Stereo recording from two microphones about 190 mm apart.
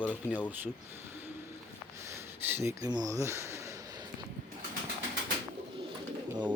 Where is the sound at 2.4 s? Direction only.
10° right (ahead or behind).